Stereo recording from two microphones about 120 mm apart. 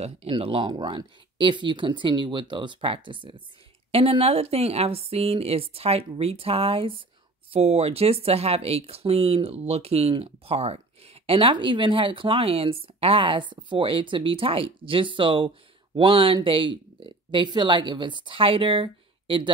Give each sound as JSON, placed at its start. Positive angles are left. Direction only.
{"t": 0.0, "sound": "speech", "side_deg": -55}